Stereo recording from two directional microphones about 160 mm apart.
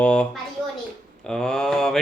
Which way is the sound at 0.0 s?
5° left (ahead or behind).